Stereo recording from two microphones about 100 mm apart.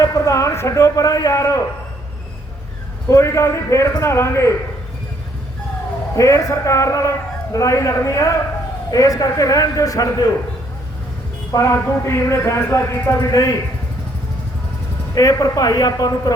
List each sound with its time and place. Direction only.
0.0 s a man's voice: 35° left (ahead or behind)
3.1 s speech: 30° left (ahead or behind)
6.1 s a man's voice: 35° left (ahead or behind)
11.5 s speech: 30° left (ahead or behind)
15.1 s a man's voice: 35° left (ahead or behind)